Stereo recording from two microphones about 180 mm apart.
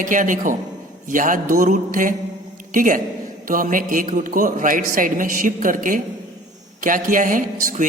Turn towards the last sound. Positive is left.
turn(degrees=-50)  # may be behind; listen again after turning